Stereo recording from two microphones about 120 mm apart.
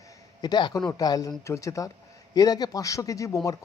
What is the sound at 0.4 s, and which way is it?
Speech, 35° left (ahead or behind).